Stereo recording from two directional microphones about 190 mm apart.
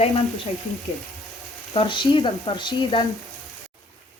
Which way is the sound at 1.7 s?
25° left (ahead or behind).